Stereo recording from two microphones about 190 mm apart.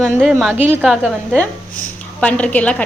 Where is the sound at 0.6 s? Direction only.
10° right (ahead or behind).